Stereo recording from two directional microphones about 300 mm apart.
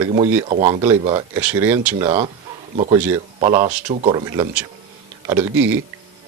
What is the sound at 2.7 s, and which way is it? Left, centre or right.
Speech, centre.